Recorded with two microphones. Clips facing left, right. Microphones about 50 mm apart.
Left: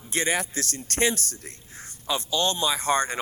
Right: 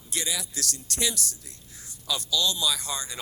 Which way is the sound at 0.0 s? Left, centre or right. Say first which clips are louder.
Left 7 dB; left.